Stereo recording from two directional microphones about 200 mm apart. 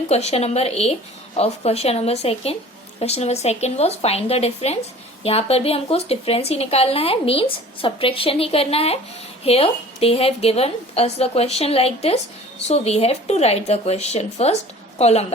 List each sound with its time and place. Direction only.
0.1 s a woman's voice: 30° left (ahead or behind)